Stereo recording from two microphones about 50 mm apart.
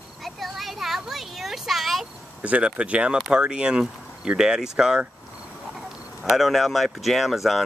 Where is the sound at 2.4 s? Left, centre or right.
Right.